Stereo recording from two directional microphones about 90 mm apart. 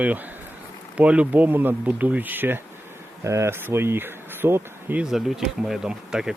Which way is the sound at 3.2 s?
35° right (ahead or behind).